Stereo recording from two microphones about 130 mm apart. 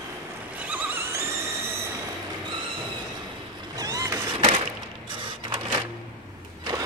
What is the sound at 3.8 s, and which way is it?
Vehicle, 25° right (ahead or behind).